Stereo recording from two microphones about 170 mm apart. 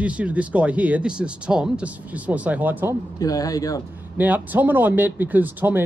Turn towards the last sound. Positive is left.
turn(degrees=-10)  # may be behind; listen again after turning